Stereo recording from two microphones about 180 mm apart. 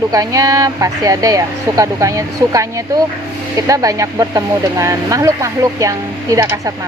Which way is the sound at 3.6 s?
20° right (ahead or behind).